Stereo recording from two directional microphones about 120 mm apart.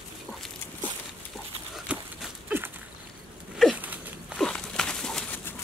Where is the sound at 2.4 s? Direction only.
15° right (ahead or behind).